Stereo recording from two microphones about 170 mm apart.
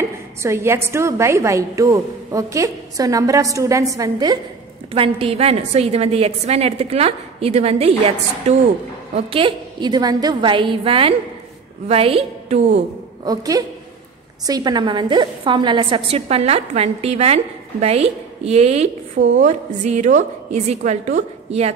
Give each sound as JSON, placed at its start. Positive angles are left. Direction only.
{"t": 0.4, "sound": "a woman's voice", "side_deg": -15}
{"t": 4.9, "sound": "a woman's voice", "side_deg": -35}
{"t": 13.2, "sound": "a woman's voice", "side_deg": -20}